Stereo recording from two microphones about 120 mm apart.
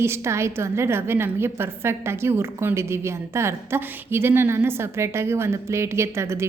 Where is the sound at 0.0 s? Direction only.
20° right (ahead or behind).